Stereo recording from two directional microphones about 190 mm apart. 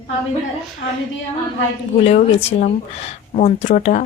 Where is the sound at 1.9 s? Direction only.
35° left (ahead or behind).